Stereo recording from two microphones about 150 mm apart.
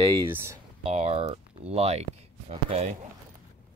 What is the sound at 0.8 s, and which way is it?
Speech, 40° right (ahead or behind).